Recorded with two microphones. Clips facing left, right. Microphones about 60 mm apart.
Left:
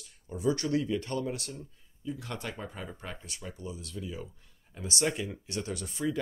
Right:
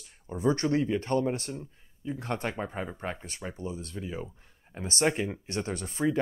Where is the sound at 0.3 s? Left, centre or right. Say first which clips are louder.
Right 3 dB; right.